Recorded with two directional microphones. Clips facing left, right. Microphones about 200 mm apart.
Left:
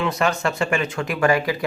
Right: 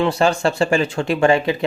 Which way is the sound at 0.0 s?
30° right (ahead or behind).